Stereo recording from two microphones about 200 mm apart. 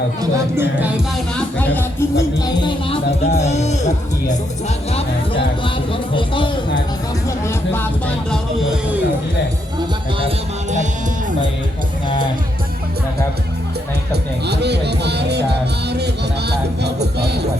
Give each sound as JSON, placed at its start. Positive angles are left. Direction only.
{"t": 0.2, "sound": "speech", "side_deg": -15}
{"t": 1.5, "sound": "speech", "side_deg": 10}
{"t": 7.3, "sound": "speech", "side_deg": 10}
{"t": 10.2, "sound": "music", "side_deg": -30}
{"t": 14.1, "sound": "speech", "side_deg": -55}
{"t": 16.5, "sound": "speech", "side_deg": -55}